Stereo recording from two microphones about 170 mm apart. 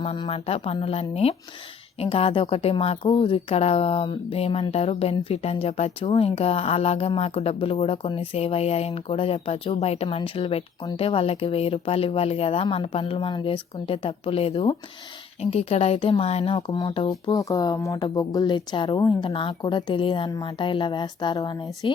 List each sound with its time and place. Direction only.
0.0 s a woman's voice: 35° left (ahead or behind)